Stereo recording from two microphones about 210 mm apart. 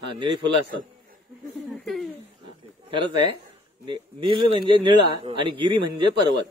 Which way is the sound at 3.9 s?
25° right (ahead or behind).